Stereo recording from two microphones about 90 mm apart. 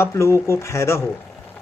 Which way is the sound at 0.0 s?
30° left (ahead or behind).